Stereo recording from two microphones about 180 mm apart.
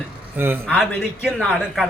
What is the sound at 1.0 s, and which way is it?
Speech, centre (ahead or behind).